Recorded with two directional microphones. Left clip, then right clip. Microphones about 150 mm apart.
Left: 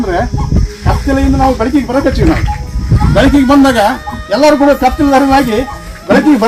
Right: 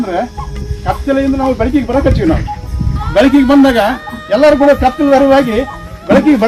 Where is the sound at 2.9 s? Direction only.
Centre (ahead or behind).